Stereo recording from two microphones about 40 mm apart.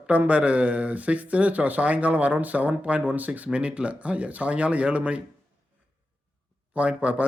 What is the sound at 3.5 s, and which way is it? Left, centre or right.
Speech, right.